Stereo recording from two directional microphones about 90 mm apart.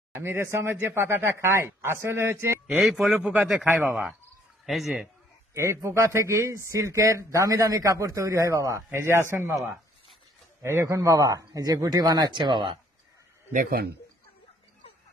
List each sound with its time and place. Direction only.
0.1 s speech: 30° right (ahead or behind)
2.6 s speech: 5° right (ahead or behind)
5.5 s speech: 30° right (ahead or behind)
10.6 s speech: 30° right (ahead or behind)
12.4 s speech: 60° right (ahead or behind)